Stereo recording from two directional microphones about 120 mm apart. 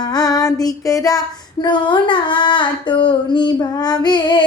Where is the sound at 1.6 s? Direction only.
40° left (ahead or behind).